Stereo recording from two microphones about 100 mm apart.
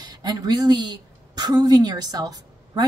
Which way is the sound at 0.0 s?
45° right (ahead or behind).